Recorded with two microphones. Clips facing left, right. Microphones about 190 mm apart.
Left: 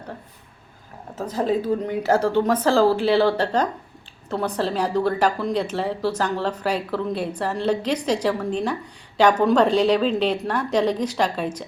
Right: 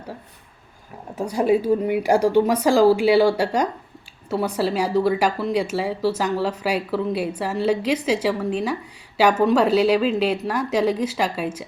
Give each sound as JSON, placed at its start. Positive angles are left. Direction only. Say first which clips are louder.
{"t": 1.1, "sound": "a woman's voice", "louder": "right 3 dB", "side_deg": -15}